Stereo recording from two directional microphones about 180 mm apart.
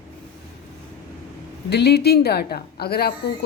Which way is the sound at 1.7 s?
65° left (ahead or behind).